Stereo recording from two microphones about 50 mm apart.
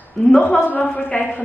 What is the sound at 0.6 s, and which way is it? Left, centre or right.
Speech, left.